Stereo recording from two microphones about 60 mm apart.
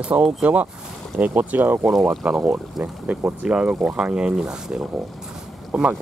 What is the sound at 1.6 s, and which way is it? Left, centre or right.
Speech, right.